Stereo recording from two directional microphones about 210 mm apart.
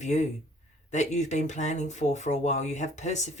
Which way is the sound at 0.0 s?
35° left (ahead or behind).